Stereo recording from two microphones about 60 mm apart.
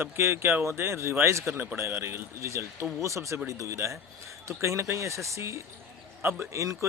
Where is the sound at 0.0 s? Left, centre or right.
Right.